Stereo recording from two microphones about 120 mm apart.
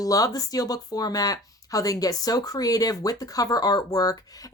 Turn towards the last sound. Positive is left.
turn(degrees=30)  # may be behind; listen again after turning